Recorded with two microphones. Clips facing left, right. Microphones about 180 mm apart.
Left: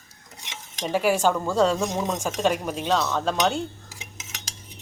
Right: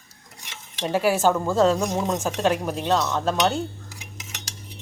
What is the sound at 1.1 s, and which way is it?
A woman's voice, 5° right (ahead or behind).